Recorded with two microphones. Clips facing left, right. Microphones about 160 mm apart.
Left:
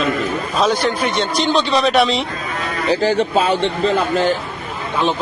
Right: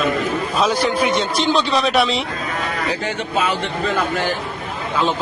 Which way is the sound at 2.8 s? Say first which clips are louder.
Left 7 dB; 30° left (ahead or behind).